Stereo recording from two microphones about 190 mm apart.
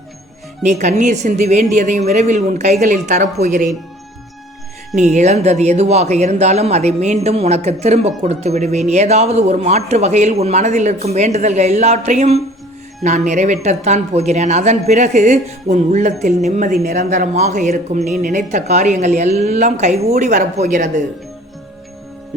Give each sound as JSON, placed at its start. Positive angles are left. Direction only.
{"t": 0.6, "sound": "speech", "side_deg": -40}
{"t": 4.9, "sound": "speech", "side_deg": -35}